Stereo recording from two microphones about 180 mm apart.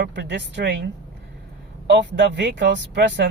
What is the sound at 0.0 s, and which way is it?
Speech, 70° right (ahead or behind).